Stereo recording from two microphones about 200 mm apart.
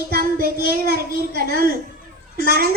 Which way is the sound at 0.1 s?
50° right (ahead or behind).